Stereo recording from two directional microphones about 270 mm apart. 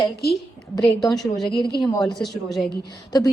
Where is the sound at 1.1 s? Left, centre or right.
Centre.